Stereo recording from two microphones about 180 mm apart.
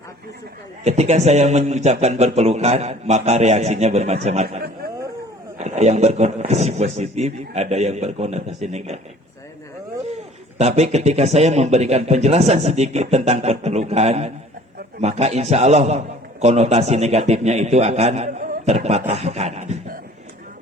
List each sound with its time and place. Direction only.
0.9 s a man's voice: 40° right (ahead or behind)
5.5 s a man's voice: 40° right (ahead or behind)
10.6 s a man's voice: 40° right (ahead or behind)